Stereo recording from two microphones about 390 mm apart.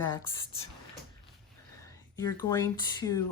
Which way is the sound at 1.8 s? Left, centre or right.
Centre.